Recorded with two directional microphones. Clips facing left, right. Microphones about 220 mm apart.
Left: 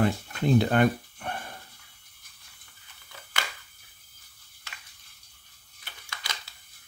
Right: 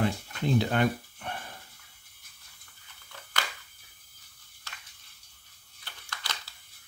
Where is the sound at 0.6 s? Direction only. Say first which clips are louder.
Left 4 dB; 55° left (ahead or behind).